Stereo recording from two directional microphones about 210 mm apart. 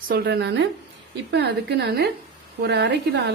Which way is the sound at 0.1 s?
50° right (ahead or behind).